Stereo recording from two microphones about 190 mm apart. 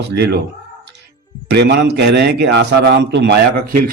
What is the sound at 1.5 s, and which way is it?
Speech, 65° right (ahead or behind).